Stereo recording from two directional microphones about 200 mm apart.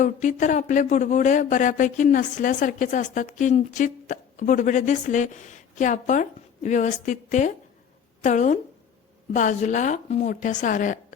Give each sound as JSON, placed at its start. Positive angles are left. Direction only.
{"t": 0.0, "sound": "speech", "side_deg": 40}